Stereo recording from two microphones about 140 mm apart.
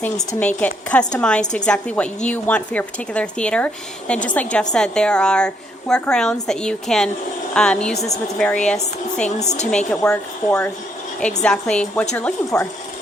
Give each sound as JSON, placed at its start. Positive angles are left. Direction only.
{"t": 0.3, "sound": "a woman's voice", "side_deg": 10}
{"t": 7.9, "sound": "a woman's voice", "side_deg": 50}
{"t": 8.4, "sound": "a woman's voice", "side_deg": 5}
{"t": 9.4, "sound": "a woman's voice", "side_deg": 55}
{"t": 9.6, "sound": "a woman's voice", "side_deg": 5}